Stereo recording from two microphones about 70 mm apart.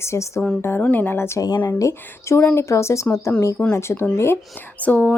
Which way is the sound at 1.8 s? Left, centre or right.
Left.